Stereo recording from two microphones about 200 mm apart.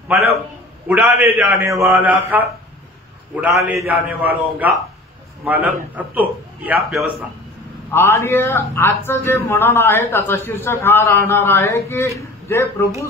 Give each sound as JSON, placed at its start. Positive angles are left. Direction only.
{"t": 0.8, "sound": "a man's voice", "side_deg": -10}
{"t": 7.9, "sound": "a man's voice", "side_deg": 15}